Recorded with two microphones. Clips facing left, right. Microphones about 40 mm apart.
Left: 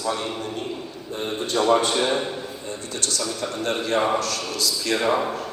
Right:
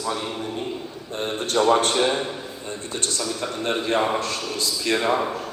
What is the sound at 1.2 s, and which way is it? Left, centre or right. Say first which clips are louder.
Speech: right 2 dB; right.